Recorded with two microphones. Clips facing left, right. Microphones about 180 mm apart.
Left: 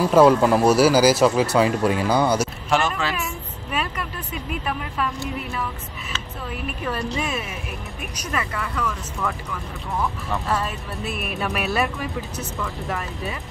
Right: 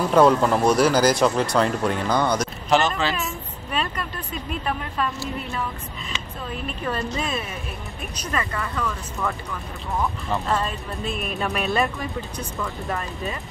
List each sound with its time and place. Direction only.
0.1 s speech: 5° left (ahead or behind)
3.7 s vehicle: 10° left (ahead or behind)
6.5 s speech: 10° left (ahead or behind)
10.3 s speech: 10° left (ahead or behind)